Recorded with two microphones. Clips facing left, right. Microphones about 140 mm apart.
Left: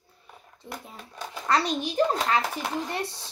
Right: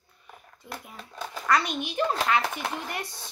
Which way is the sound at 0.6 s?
30° left (ahead or behind).